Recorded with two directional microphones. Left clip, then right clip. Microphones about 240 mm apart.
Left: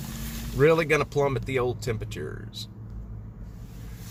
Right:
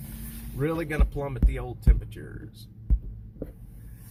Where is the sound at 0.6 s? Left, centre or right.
Centre.